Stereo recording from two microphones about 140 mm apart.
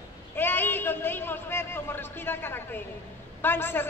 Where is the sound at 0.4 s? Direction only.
15° left (ahead or behind).